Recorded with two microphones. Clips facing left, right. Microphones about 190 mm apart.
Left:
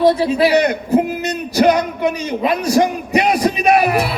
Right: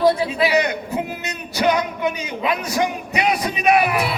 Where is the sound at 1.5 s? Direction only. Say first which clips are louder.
Left 6 dB; 40° left (ahead or behind).